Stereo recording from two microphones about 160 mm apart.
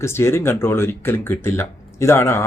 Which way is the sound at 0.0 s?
15° left (ahead or behind).